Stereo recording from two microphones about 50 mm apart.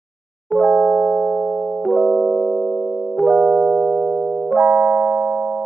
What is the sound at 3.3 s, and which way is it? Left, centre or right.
Music, centre.